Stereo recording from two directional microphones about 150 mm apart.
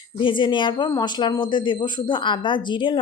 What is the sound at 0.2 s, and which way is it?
Speech, 35° left (ahead or behind).